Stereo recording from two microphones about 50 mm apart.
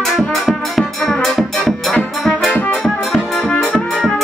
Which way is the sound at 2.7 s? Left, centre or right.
Centre.